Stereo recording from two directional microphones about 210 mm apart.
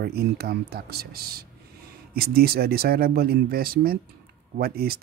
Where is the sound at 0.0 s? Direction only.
50° right (ahead or behind).